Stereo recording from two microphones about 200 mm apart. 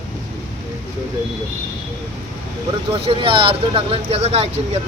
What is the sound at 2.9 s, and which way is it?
Speech, 25° right (ahead or behind).